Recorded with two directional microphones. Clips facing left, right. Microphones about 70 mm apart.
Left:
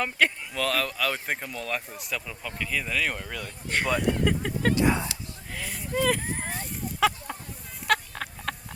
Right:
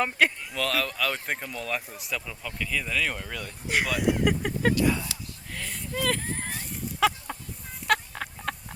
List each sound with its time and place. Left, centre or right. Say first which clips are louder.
0.0 s speech: right 1 dB; centre
4.7 s speech: left 4 dB; left
5.5 s speech: left 1 dB; centre
5.9 s a sound: left 3 dB; centre
7.9 s chicken: even; centre